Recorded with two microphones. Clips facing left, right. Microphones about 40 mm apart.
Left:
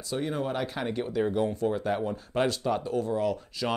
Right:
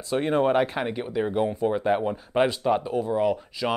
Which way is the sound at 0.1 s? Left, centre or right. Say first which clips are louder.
Right 8 dB; right.